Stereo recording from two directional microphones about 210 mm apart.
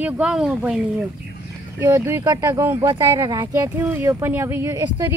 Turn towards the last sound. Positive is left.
turn(degrees=-15)  # may be behind; listen again after turning